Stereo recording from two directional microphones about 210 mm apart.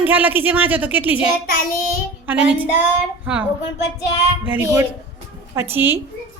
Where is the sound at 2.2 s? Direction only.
5° right (ahead or behind).